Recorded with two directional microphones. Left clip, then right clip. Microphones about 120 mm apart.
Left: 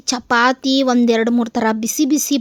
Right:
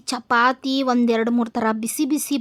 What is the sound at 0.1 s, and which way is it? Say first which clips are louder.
A woman's voice: left 3 dB; 25° left (ahead or behind).